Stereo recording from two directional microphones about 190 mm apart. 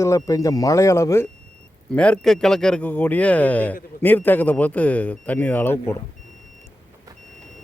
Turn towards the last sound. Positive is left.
turn(degrees=10)  # may be behind; listen again after turning